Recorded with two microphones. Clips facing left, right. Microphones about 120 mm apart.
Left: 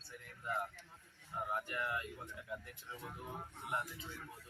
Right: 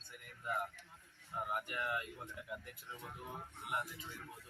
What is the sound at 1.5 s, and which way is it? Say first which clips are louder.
Speech: even; 15° right (ahead or behind).